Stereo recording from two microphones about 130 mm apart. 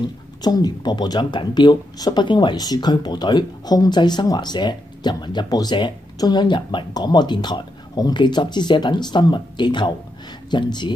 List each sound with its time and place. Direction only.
0.4 s speech: 30° left (ahead or behind)